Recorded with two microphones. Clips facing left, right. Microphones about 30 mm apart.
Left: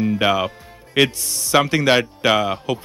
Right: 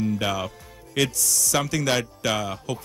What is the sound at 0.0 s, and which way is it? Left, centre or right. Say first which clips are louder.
A man's voice: left 7 dB; left.